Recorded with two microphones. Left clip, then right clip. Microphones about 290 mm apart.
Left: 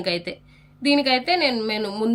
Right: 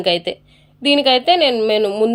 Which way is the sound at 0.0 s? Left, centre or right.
Centre.